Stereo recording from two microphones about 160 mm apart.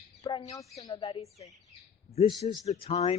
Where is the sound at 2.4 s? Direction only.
35° left (ahead or behind).